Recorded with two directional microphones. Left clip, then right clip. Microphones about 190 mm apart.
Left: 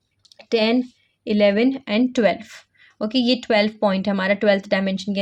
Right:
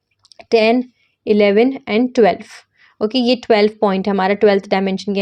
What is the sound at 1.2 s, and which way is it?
A woman's voice, 30° right (ahead or behind).